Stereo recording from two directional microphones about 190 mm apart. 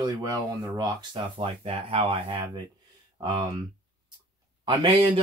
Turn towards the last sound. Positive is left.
turn(degrees=-25)  # may be behind; listen again after turning